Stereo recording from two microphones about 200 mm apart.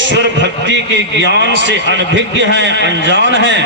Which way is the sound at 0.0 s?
65° right (ahead or behind).